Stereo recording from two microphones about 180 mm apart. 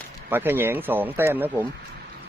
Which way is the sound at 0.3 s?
10° right (ahead or behind).